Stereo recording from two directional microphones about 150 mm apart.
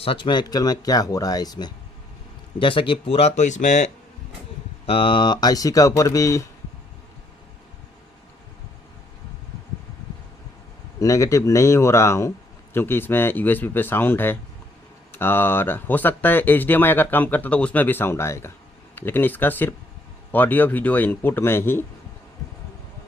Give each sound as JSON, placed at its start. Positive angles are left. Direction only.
{"t": 0.0, "sound": "speech", "side_deg": 35}
{"t": 4.9, "sound": "speech", "side_deg": 35}
{"t": 11.0, "sound": "speech", "side_deg": 20}